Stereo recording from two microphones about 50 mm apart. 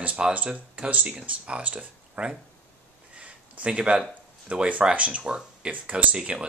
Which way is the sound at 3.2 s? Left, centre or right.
Right.